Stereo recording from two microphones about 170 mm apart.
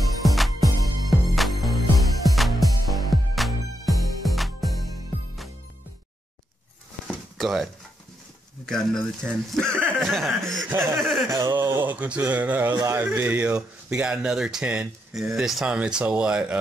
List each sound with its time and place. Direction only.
0.2 s music: centre (ahead or behind)
7.1 s a sound: centre (ahead or behind)
8.6 s speech: 5° left (ahead or behind)
10.7 s speech: 15° right (ahead or behind)